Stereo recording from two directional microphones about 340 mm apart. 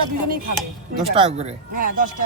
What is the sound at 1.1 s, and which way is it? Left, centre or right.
Speech, centre.